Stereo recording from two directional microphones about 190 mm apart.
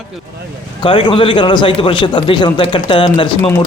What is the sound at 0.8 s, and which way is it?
A man's voice, 25° left (ahead or behind).